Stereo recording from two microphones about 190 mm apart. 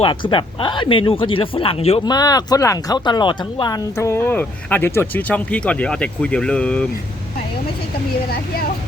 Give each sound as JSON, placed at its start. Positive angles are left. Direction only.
{"t": 0.0, "sound": "speech", "side_deg": 25}
{"t": 2.1, "sound": "speech", "side_deg": 20}